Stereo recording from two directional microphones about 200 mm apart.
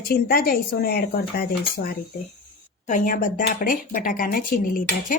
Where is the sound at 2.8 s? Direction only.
40° left (ahead or behind).